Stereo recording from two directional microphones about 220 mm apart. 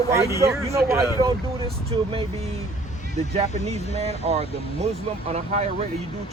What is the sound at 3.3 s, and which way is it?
Speech, 30° right (ahead or behind).